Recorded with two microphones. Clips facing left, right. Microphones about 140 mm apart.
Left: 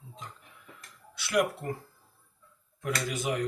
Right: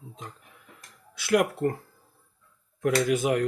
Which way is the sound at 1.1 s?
50° right (ahead or behind).